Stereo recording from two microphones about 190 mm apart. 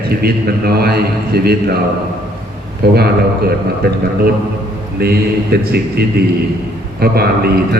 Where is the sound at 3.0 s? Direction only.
55° right (ahead or behind).